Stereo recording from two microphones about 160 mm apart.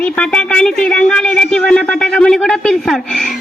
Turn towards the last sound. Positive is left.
turn(degrees=0)  # may be behind; listen again after turning